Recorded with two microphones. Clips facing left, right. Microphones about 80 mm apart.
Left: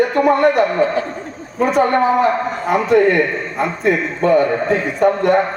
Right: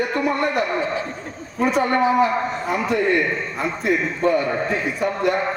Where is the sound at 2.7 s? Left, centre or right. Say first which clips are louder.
Left 8 dB; left.